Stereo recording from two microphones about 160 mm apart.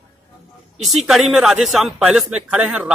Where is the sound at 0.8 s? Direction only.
Centre (ahead or behind).